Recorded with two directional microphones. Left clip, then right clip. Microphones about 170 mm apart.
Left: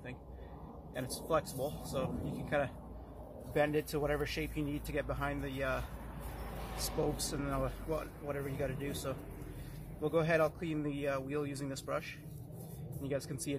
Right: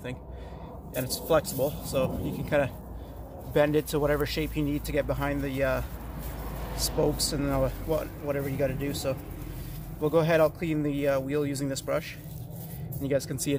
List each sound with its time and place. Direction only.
0.9 s speech: 35° right (ahead or behind)
3.5 s speech: 35° right (ahead or behind)
7.0 s speech: 35° right (ahead or behind)